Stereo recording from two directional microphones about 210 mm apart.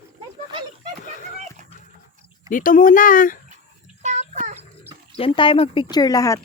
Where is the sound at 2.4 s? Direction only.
40° left (ahead or behind).